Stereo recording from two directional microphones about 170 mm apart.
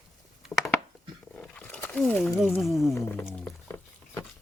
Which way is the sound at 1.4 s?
5° left (ahead or behind).